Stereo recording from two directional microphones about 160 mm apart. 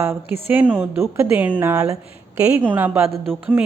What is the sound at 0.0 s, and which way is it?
Speech, 15° right (ahead or behind).